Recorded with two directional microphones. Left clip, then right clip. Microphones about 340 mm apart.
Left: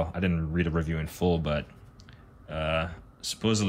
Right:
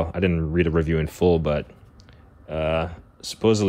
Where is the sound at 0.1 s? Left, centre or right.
Right.